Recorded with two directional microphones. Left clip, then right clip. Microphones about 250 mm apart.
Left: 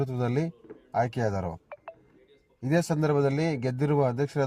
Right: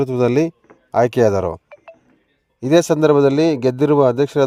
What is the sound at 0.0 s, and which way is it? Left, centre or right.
A man's voice, right.